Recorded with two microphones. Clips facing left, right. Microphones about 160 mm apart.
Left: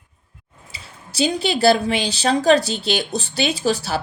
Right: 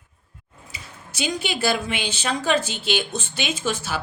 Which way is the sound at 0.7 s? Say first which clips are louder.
Left 8 dB; 30° left (ahead or behind).